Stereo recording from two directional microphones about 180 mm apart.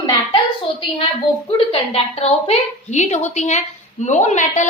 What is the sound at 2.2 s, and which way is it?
A woman's voice, 40° left (ahead or behind).